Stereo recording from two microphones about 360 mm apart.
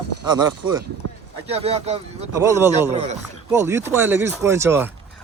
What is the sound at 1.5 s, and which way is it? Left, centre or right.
Speech, centre.